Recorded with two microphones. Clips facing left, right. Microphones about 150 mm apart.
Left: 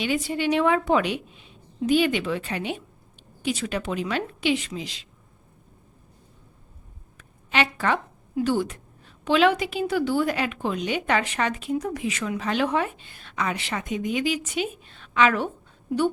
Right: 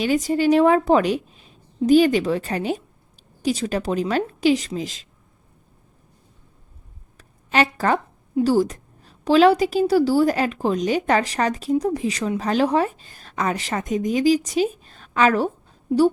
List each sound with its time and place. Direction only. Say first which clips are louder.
0.0 s a woman's voice: right 6 dB; 40° right (ahead or behind)
7.2 s a sound: right 4 dB; 40° right (ahead or behind)
8.4 s a woman's voice: right 6 dB; 35° right (ahead or behind)